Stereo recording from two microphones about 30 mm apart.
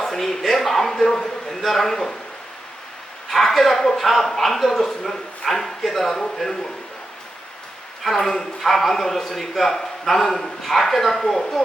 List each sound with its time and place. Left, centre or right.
0.0 s a man's voice: centre
3.2 s a sound: centre
3.9 s a man's voice: centre
5.0 s speech: centre
5.5 s a man's voice: centre
8.0 s a man's voice: centre
9.7 s a sound: centre
10.1 s a man's voice: centre